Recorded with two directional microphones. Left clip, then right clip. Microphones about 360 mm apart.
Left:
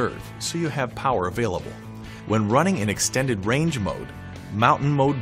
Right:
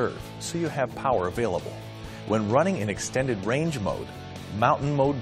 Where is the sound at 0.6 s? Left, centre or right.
Right.